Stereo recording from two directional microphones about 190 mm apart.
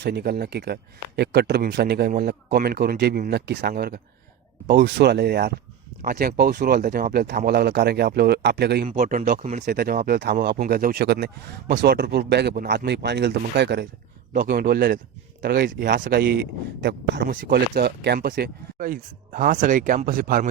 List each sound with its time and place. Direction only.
0.0 s speech: 60° right (ahead or behind)
8.9 s speech: 45° right (ahead or behind)
9.6 s speech: 55° right (ahead or behind)
14.3 s speech: 50° right (ahead or behind)